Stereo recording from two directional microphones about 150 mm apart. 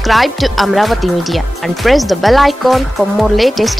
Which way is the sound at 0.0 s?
Centre (ahead or behind).